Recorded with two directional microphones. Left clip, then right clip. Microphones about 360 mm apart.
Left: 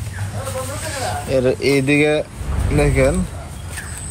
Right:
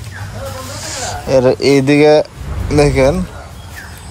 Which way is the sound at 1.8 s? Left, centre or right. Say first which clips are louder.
Right 5 dB; right.